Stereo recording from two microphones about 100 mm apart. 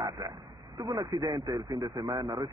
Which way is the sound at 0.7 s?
40° right (ahead or behind).